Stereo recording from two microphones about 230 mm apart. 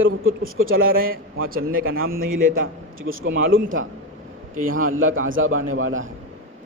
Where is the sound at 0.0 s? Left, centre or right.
Right.